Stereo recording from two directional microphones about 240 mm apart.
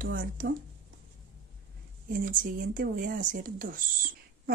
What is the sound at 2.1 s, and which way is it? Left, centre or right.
Speech, right.